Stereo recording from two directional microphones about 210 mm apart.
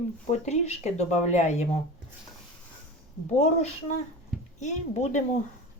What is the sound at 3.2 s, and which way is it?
Speech, 35° left (ahead or behind).